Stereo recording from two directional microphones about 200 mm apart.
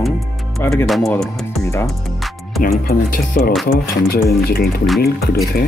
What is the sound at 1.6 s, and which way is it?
Speech, 15° left (ahead or behind).